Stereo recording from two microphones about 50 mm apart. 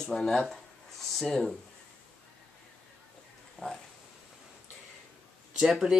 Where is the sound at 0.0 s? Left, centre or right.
Centre.